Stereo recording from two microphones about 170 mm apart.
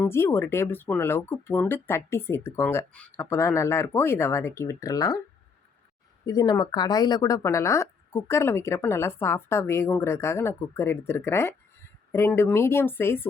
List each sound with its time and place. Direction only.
0.0 s a woman's voice: 15° left (ahead or behind)
6.2 s a woman's voice: 25° left (ahead or behind)